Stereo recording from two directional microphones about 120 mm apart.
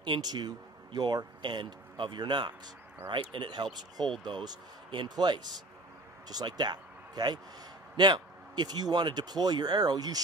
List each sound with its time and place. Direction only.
0.0 s speech: 35° right (ahead or behind)